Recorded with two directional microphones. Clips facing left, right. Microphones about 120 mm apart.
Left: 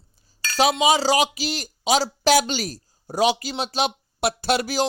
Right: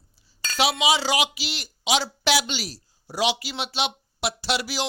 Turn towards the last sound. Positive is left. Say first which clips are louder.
# left 5 dB
turn(degrees=45)  # may be behind; listen again after turning